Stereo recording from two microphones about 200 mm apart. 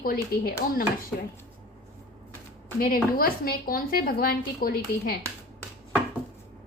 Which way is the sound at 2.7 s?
45° left (ahead or behind).